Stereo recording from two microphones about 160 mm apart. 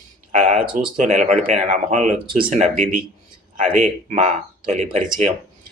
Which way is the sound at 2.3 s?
60° right (ahead or behind).